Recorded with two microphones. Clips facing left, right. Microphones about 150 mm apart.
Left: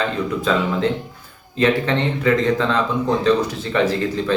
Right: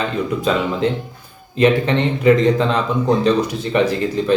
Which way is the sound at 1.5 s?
15° right (ahead or behind).